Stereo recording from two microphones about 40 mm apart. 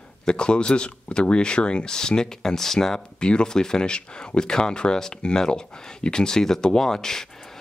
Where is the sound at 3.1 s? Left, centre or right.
Left.